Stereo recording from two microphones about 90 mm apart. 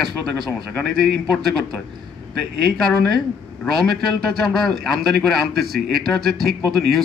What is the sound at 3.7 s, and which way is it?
A man's voice, centre (ahead or behind).